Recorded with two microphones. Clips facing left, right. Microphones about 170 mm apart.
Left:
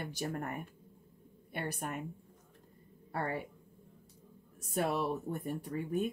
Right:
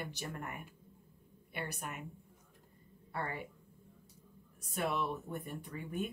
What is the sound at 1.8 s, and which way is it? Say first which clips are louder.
Speech: left 5 dB; 40° left (ahead or behind).